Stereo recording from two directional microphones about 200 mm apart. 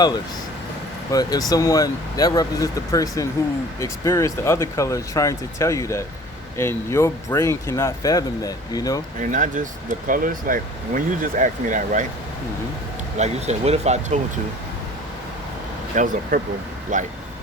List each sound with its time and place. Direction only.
1.1 s speech: 20° left (ahead or behind)
9.3 s speech: 40° right (ahead or behind)
13.1 s speech: 35° right (ahead or behind)
15.9 s speech: 40° right (ahead or behind)